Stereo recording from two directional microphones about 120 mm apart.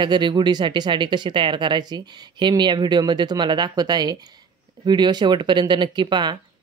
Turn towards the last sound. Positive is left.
turn(degrees=-40)  # may be behind; listen again after turning